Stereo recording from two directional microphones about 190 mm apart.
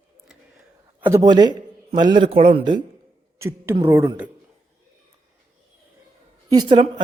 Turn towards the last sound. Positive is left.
turn(degrees=-25)  # may be behind; listen again after turning